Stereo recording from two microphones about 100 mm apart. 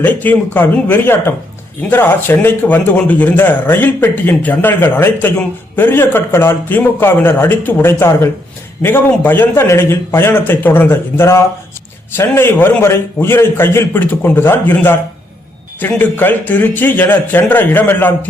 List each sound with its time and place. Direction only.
0.0 s speech: 20° left (ahead or behind)
16.0 s speech: 20° left (ahead or behind)